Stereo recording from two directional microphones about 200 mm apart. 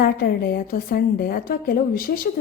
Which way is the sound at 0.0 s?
50° left (ahead or behind).